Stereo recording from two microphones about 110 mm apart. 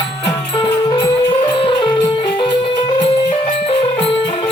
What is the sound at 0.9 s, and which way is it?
Music, 50° left (ahead or behind).